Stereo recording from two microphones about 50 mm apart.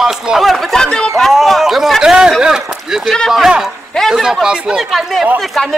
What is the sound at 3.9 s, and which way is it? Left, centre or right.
Speech, centre.